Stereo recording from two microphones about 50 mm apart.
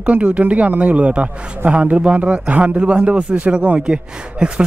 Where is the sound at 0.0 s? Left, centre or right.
Right.